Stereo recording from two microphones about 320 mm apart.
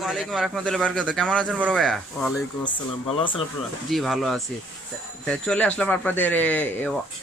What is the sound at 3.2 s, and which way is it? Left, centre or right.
Speech, centre.